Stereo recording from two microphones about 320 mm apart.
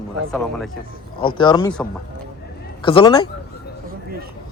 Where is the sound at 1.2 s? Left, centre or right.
Centre.